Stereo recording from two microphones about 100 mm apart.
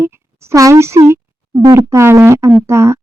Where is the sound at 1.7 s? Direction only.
30° right (ahead or behind).